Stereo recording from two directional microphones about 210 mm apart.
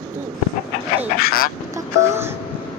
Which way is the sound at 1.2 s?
45° left (ahead or behind).